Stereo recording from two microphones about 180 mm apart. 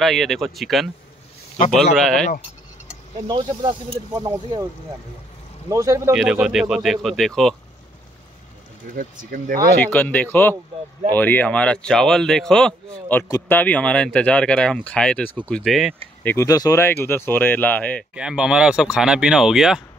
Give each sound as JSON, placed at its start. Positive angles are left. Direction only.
{"t": 0.0, "sound": "speech", "side_deg": 0}
{"t": 2.0, "sound": "speech", "side_deg": 0}
{"t": 3.3, "sound": "speech", "side_deg": -25}
{"t": 5.7, "sound": "speech", "side_deg": -15}
{"t": 6.1, "sound": "speech", "side_deg": -5}
{"t": 8.9, "sound": "speech", "side_deg": -50}
{"t": 9.9, "sound": "speech", "side_deg": 10}
{"t": 16.3, "sound": "speech", "side_deg": 15}
{"t": 18.1, "sound": "speech", "side_deg": -5}